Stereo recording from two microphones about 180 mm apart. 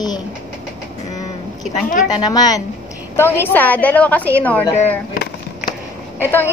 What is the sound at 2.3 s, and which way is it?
A woman's voice, 20° left (ahead or behind).